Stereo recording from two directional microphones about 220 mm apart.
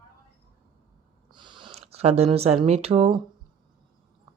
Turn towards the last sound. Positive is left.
turn(degrees=-25)  # may be behind; listen again after turning